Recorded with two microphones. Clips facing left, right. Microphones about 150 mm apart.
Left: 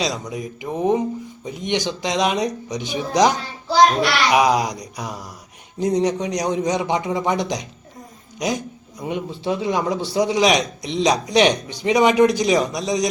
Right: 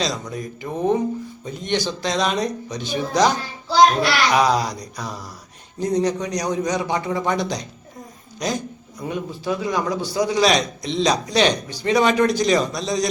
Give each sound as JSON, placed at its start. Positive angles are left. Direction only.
{"t": 0.0, "sound": "a man's voice", "side_deg": 10}